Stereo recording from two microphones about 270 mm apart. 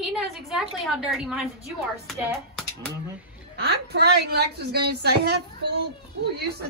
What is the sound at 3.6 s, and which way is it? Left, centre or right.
A woman's voice, right.